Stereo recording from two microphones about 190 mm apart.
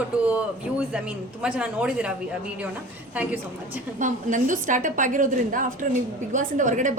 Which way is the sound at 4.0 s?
40° right (ahead or behind).